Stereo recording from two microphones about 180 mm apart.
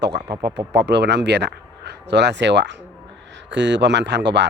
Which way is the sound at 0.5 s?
70° right (ahead or behind).